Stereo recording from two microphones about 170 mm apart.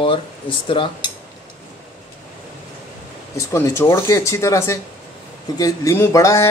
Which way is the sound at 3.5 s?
15° left (ahead or behind).